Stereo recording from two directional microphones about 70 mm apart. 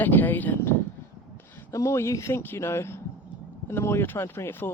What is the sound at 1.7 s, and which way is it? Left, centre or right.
Speech, left.